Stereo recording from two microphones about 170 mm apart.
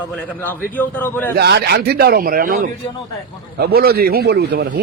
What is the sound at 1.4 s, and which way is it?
Speech, 70° right (ahead or behind).